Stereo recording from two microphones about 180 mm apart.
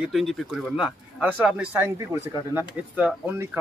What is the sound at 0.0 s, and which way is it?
Speech, centre (ahead or behind).